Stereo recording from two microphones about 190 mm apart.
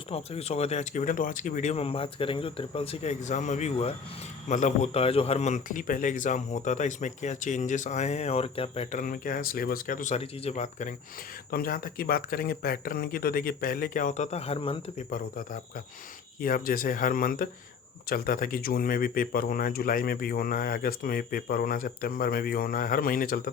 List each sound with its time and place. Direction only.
0.1 s a man's voice: 35° left (ahead or behind)
11.5 s speech: 50° left (ahead or behind); by 15.0 s 30° left (ahead or behind)
15.1 s speech: 45° left (ahead or behind)